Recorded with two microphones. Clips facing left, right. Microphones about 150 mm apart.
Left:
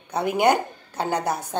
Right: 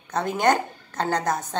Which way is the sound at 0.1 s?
10° left (ahead or behind).